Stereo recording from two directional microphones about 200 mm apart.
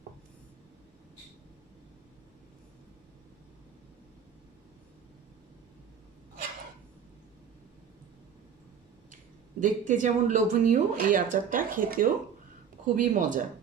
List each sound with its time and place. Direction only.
9.6 s speech: 40° right (ahead or behind)